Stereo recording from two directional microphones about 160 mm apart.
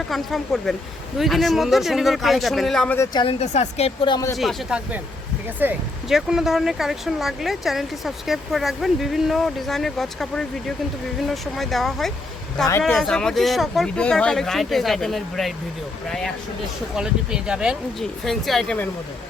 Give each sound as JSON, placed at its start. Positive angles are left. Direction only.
{"t": 0.1, "sound": "speech", "side_deg": 0}
{"t": 3.0, "sound": "speech", "side_deg": 25}
{"t": 4.4, "sound": "speech", "side_deg": -5}